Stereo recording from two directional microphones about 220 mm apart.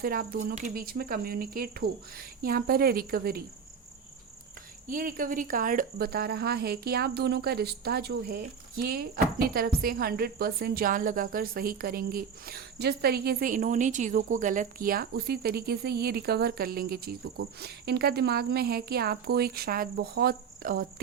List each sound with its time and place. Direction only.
0.0 s speech: 40° right (ahead or behind)
4.9 s speech: 40° right (ahead or behind)